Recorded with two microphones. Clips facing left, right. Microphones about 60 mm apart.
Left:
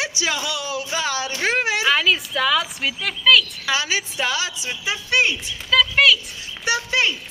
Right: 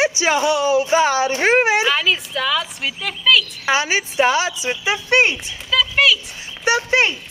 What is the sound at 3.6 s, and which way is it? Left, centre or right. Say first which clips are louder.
A woman's voice: right 4 dB; right.